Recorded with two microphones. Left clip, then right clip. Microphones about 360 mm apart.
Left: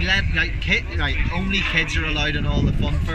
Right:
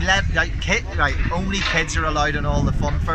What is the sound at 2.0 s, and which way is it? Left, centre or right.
Speech, centre.